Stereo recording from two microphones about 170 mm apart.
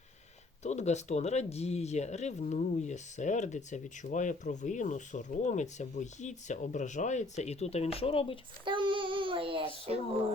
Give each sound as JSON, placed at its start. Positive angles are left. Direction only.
{"t": 0.6, "sound": "speech", "side_deg": 40}
{"t": 8.6, "sound": "child singing", "side_deg": -30}